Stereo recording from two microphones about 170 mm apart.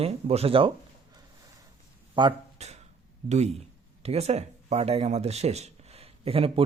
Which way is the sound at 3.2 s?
40° right (ahead or behind).